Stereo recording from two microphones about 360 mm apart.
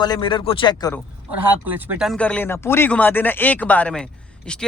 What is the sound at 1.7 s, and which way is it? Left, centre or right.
Speech, centre.